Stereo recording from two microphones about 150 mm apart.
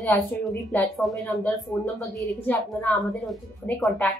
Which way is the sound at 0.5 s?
5° left (ahead or behind).